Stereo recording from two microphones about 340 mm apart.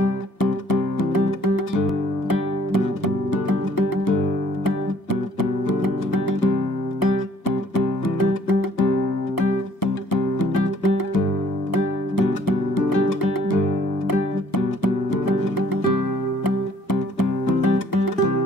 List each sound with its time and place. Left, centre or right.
0.4 s music: left
3.4 s music: left
5.4 s music: left
10.4 s music: left
14.8 s music: left
17.2 s music: left